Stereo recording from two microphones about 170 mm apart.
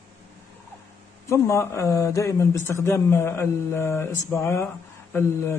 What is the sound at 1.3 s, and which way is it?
Speech, 15° left (ahead or behind).